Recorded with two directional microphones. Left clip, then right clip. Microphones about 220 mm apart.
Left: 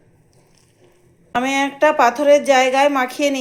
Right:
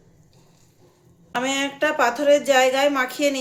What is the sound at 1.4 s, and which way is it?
A man's voice, 10° left (ahead or behind).